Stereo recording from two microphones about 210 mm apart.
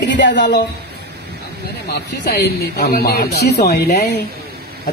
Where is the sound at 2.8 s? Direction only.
45° left (ahead or behind).